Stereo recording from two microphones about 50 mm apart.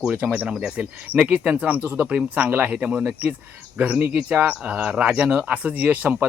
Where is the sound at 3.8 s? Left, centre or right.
Right.